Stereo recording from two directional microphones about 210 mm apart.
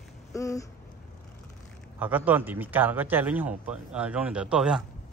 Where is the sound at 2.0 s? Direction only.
10° right (ahead or behind).